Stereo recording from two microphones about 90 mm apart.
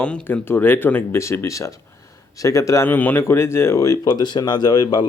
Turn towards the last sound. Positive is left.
turn(degrees=50)  # may be behind; listen again after turning